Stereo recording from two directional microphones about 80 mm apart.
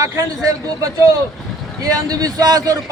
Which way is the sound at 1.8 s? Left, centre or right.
Right.